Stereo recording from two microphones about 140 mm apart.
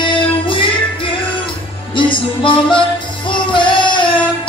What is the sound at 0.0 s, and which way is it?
Music, 35° left (ahead or behind).